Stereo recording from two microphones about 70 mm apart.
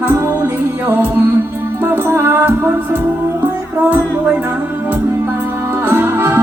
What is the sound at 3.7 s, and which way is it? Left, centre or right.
Music, right.